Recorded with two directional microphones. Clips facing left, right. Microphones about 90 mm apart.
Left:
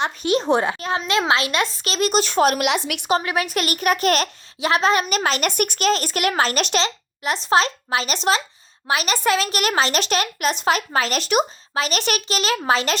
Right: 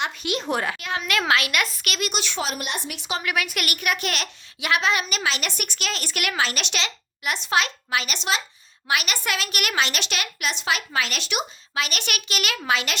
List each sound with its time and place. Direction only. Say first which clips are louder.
0.0 s a child's voice: left 6 dB; 35° left (ahead or behind)
2.5 s a woman's voice: left 9 dB; 90° left
3.1 s a child's voice: left 6 dB; 35° left (ahead or behind)